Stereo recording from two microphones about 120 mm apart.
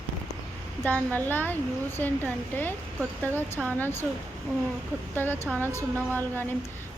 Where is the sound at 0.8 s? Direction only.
15° left (ahead or behind).